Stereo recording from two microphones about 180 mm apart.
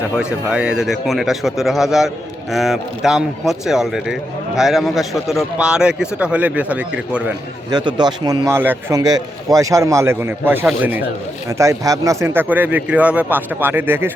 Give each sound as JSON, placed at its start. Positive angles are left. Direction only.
{"t": 0.2, "sound": "speech", "side_deg": -5}
{"t": 7.7, "sound": "a man's voice", "side_deg": -25}